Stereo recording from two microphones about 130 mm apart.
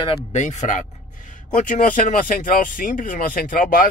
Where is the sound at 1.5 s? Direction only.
75° left (ahead or behind).